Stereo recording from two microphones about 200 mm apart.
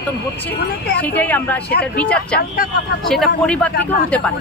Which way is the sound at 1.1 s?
10° left (ahead or behind).